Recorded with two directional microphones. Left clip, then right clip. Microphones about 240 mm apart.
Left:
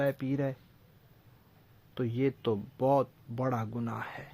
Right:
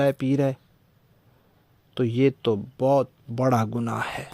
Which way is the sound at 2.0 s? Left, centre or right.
Right.